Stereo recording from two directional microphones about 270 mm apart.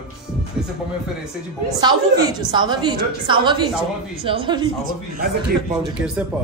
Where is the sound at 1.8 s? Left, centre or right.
Centre.